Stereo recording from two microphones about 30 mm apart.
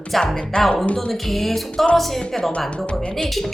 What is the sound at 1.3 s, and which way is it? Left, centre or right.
A woman's voice, centre.